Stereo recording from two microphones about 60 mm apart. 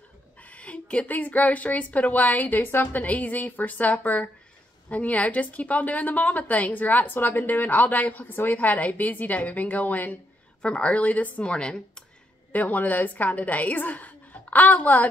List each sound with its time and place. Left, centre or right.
0.4 s a woman's voice: left
12.5 s a woman's voice: left